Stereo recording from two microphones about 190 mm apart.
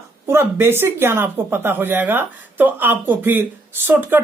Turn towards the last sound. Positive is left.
turn(degrees=-10)  # may be behind; listen again after turning